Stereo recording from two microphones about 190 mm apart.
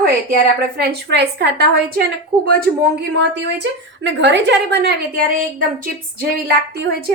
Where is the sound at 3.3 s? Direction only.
70° right (ahead or behind).